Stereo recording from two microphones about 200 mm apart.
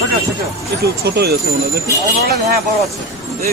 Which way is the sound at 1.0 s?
55° right (ahead or behind).